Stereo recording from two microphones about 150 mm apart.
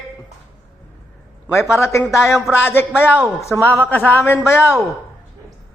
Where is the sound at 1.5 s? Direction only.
20° left (ahead or behind).